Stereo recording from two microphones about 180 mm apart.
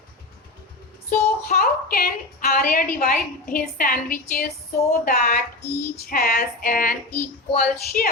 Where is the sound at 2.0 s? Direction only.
55° left (ahead or behind).